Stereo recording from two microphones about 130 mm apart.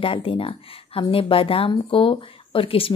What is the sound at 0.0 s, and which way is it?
A woman's voice, 45° left (ahead or behind).